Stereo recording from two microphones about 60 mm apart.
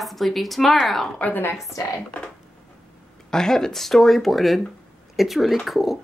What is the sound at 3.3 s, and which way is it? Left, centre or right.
A woman's voice, centre.